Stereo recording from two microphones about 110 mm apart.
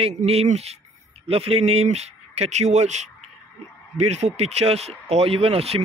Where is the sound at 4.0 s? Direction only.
80° right.